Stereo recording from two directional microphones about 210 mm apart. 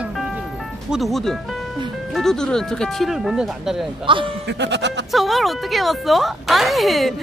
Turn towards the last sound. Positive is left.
turn(degrees=0)  # may be behind; listen again after turning